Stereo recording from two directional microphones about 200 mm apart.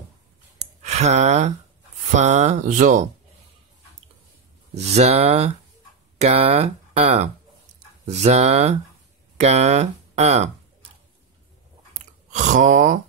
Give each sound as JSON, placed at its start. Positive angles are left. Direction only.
{"t": 0.8, "sound": "speech", "side_deg": -35}
{"t": 4.7, "sound": "speech", "side_deg": -35}
{"t": 12.3, "sound": "speech", "side_deg": -40}